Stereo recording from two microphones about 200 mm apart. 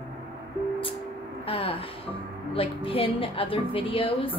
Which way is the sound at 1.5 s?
25° left (ahead or behind).